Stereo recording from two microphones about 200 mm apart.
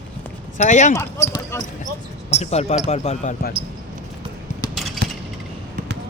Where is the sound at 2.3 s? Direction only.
30° left (ahead or behind).